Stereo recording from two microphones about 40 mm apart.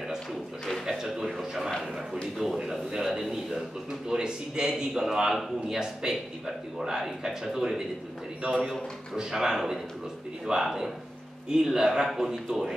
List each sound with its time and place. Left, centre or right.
0.8 s a sound: centre
2.3 s a man's voice: centre
4.1 s a man's voice: centre
9.1 s speech: centre